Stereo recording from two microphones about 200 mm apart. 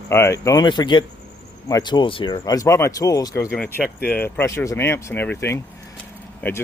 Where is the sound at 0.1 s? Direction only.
15° left (ahead or behind).